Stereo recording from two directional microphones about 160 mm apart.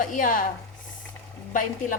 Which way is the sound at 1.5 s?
55° left (ahead or behind).